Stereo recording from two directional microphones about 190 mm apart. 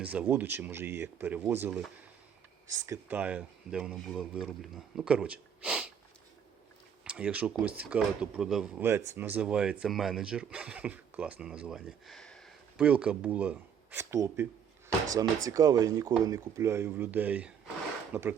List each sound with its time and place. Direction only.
0.0 s speech: 10° right (ahead or behind)
7.0 s speech: 5° right (ahead or behind)
15.4 s speech: 20° right (ahead or behind)